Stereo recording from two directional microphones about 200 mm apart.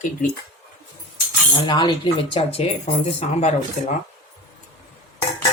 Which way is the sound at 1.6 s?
20° left (ahead or behind).